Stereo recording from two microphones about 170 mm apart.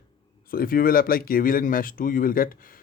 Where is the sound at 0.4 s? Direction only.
60° left (ahead or behind).